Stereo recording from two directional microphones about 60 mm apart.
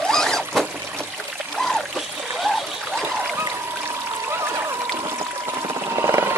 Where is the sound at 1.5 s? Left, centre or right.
Centre.